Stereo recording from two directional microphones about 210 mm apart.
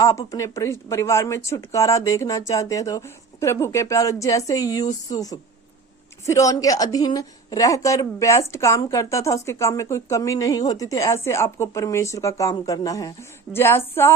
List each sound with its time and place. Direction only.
0.0 s a woman's voice: 15° left (ahead or behind)